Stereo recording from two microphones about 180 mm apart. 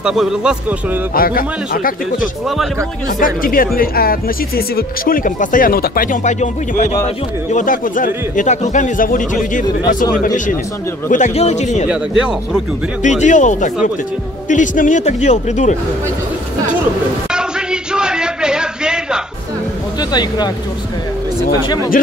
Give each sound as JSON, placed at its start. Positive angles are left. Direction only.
{"t": 0.0, "sound": "a man's voice", "side_deg": -5}
{"t": 1.1, "sound": "speech", "side_deg": 55}
{"t": 2.4, "sound": "a man's voice", "side_deg": 0}
{"t": 3.2, "sound": "a man's voice", "side_deg": 50}
{"t": 13.0, "sound": "a man's voice", "side_deg": 40}
{"t": 17.3, "sound": "a sound", "side_deg": -5}
{"t": 20.0, "sound": "speech", "side_deg": 20}